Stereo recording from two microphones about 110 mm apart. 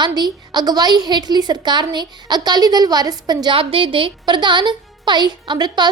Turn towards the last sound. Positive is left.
turn(degrees=-45)  # may be behind; listen again after turning